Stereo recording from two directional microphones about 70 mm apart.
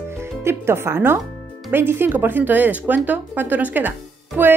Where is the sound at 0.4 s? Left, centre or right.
Right.